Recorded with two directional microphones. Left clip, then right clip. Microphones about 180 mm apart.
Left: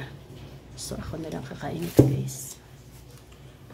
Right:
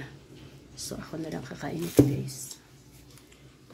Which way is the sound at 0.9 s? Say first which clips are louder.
Left 2 dB; 15° right (ahead or behind).